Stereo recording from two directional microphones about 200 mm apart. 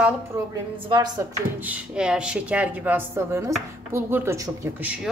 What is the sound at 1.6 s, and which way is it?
A woman's voice, 5° right (ahead or behind).